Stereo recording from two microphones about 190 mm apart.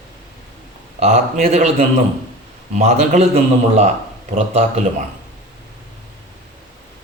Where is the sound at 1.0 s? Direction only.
35° right (ahead or behind).